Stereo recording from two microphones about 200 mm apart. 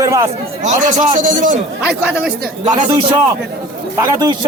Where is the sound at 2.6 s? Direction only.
30° right (ahead or behind).